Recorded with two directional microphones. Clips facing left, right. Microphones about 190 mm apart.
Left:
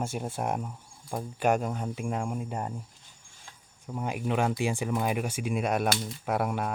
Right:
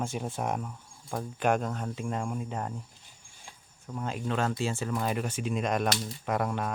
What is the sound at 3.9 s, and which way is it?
Speech, 15° left (ahead or behind).